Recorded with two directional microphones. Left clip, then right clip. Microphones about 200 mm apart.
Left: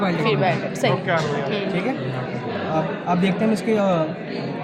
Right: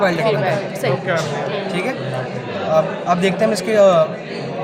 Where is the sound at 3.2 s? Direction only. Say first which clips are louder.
Right 5 dB; 55° right (ahead or behind).